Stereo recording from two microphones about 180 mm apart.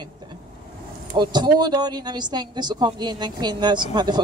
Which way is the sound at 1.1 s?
25° right (ahead or behind).